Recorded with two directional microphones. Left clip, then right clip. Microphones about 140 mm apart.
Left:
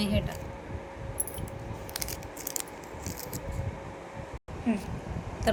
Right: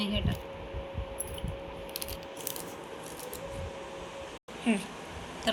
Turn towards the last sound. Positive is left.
turn(degrees=90)